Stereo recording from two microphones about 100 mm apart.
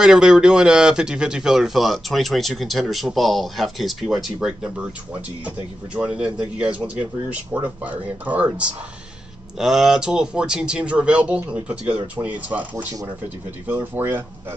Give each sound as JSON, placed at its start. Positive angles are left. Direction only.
{"t": 0.0, "sound": "speech", "side_deg": -5}
{"t": 5.9, "sound": "speech", "side_deg": -10}